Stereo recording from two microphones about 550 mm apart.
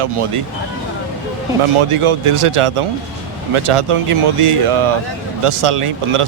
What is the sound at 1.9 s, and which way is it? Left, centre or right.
Speech, right.